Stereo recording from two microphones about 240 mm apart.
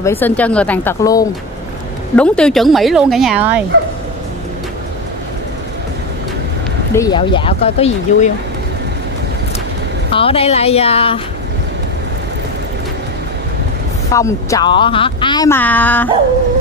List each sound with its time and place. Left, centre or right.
0.0 s speech: centre
6.9 s speech: centre
10.1 s speech: left
14.1 s speech: centre